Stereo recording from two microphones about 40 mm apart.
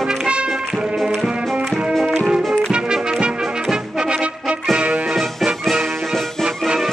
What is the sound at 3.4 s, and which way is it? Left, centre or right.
Brass instrument, centre.